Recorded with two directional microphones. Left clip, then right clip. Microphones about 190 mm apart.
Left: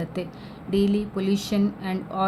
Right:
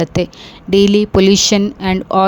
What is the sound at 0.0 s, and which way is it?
A woman's voice, 50° right (ahead or behind).